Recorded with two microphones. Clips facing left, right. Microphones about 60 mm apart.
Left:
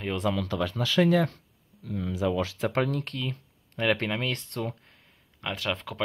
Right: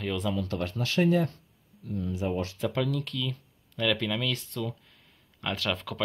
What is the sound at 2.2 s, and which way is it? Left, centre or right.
Speech, left.